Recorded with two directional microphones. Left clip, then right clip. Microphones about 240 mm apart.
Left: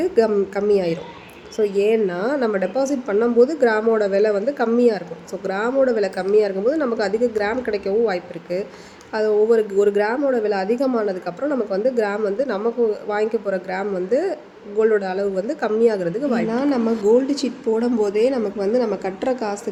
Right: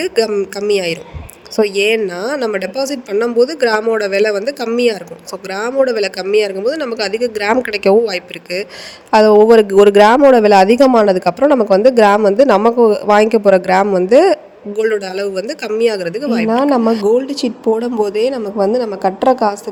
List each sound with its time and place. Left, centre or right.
0.0 s speech: right